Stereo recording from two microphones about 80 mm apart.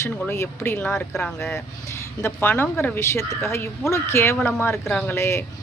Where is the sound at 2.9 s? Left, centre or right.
Left.